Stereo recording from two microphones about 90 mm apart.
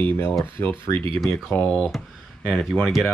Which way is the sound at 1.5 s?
10° left (ahead or behind).